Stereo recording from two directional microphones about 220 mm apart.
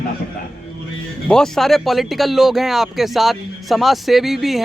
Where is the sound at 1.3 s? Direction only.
Centre (ahead or behind).